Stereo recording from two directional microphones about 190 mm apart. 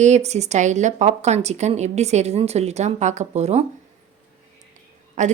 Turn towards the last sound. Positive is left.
turn(degrees=-40)  # may be behind; listen again after turning